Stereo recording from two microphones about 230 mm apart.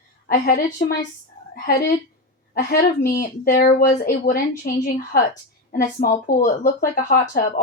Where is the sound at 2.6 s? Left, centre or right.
Left.